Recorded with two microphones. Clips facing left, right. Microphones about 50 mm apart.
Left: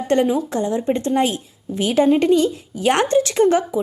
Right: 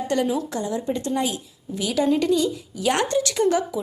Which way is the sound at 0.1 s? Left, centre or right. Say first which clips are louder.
Left 6 dB; left.